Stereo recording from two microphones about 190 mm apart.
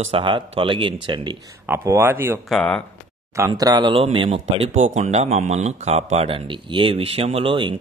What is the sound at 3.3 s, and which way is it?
Speech, 15° right (ahead or behind).